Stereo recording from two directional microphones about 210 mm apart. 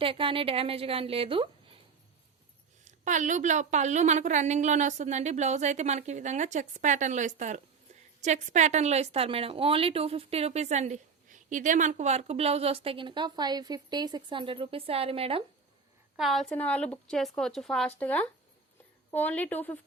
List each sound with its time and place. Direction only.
0.0 s speech: 25° right (ahead or behind)
2.8 s a woman's voice: 35° right (ahead or behind)
16.1 s a woman's voice: centre (ahead or behind)